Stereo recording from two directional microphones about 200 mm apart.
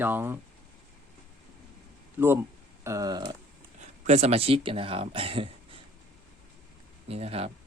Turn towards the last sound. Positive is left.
turn(degrees=-30)  # may be behind; listen again after turning